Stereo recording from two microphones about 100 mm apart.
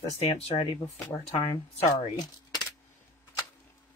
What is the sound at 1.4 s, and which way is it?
Speech, 55° left (ahead or behind).